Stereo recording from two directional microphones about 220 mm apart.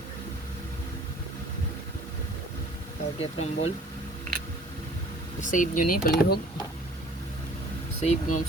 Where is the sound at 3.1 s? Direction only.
25° left (ahead or behind).